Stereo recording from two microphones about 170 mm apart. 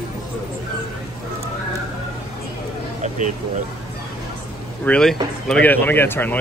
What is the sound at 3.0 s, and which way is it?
Vehicle, 45° right (ahead or behind).